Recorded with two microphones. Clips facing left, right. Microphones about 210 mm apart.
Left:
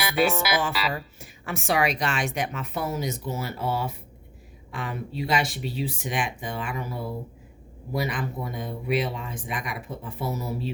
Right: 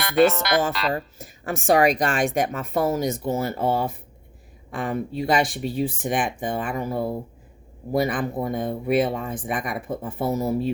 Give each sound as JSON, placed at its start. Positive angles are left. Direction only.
{"t": 0.0, "sound": "speech", "side_deg": 5}
{"t": 0.9, "sound": "speech", "side_deg": -50}